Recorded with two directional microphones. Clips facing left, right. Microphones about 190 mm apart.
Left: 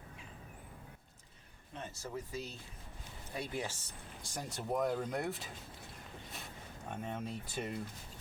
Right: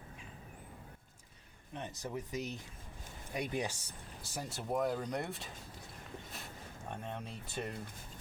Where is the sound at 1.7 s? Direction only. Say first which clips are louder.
Right 2 dB; 20° right (ahead or behind).